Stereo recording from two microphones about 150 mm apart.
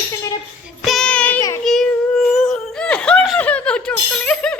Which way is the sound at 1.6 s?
Centre (ahead or behind).